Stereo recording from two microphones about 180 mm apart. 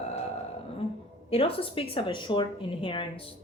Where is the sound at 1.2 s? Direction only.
30° left (ahead or behind).